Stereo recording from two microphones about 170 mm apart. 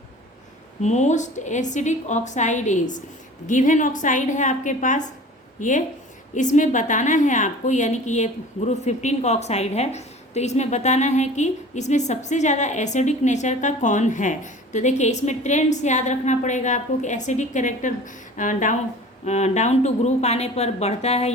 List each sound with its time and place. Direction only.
0.8 s a woman's voice: 45° left (ahead or behind)